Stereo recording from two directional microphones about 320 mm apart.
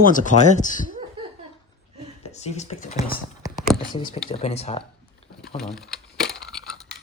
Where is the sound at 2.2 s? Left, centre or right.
Left.